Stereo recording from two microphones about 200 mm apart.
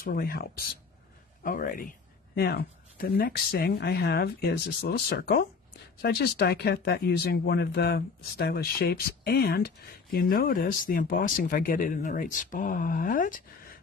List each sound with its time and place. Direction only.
0.0 s speech: 50° left (ahead or behind)